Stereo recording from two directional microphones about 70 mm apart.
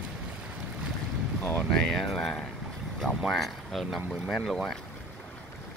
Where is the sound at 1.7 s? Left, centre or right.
Centre.